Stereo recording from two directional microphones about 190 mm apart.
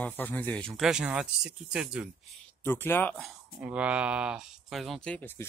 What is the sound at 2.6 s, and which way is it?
Speech, 10° left (ahead or behind).